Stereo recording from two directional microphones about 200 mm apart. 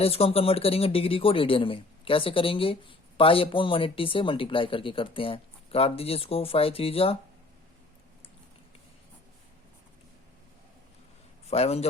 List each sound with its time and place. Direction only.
0.0 s speech: 30° left (ahead or behind)
11.4 s a man's voice: 30° left (ahead or behind)